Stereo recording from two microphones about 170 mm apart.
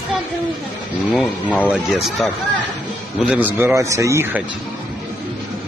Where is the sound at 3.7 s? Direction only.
15° right (ahead or behind).